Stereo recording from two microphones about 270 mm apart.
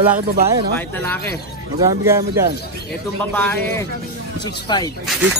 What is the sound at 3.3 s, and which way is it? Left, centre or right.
Speech, centre.